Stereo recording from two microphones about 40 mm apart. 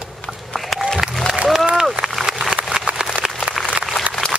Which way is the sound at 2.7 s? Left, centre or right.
Right.